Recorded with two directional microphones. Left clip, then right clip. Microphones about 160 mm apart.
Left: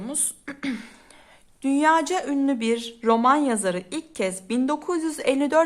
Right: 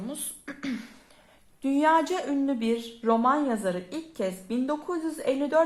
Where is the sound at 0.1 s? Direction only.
30° left (ahead or behind).